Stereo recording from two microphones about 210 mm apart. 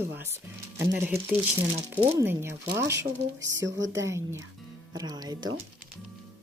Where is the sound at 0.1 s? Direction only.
10° right (ahead or behind).